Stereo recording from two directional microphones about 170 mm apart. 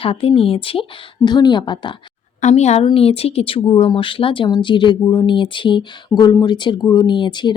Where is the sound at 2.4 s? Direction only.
40° left (ahead or behind).